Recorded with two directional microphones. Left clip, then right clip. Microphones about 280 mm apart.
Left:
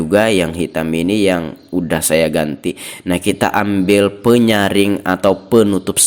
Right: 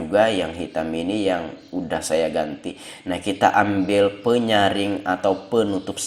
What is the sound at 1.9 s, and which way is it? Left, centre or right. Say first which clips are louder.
Speech: left 7 dB; left.